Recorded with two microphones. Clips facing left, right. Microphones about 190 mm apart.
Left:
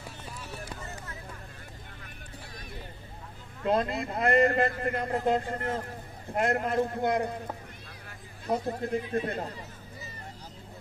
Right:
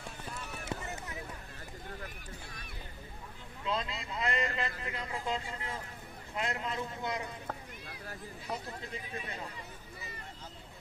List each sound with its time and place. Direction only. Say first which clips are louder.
0.7 s a sound: right 2 dB; 20° right (ahead or behind)
3.6 s a man's voice: left 9 dB; 55° left (ahead or behind)
8.5 s speech: left 12 dB; 55° left (ahead or behind)